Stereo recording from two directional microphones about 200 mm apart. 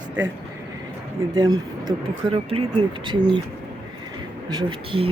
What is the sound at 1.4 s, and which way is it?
Speech, 20° right (ahead or behind).